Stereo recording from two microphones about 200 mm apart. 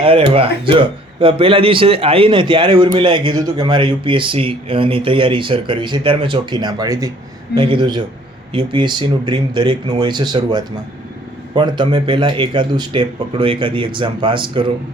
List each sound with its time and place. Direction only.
0.0 s speech: 30° right (ahead or behind)